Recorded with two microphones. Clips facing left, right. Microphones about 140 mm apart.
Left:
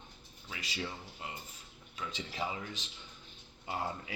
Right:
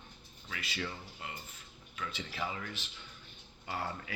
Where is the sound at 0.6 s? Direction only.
35° left (ahead or behind).